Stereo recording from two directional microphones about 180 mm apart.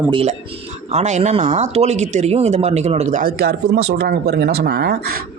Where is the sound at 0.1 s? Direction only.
30° right (ahead or behind).